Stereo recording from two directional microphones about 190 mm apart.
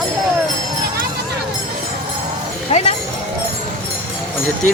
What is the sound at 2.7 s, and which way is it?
Speech, 30° left (ahead or behind).